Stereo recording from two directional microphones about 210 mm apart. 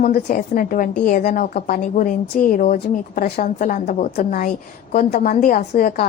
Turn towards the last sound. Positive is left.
turn(degrees=40)  # may be behind; listen again after turning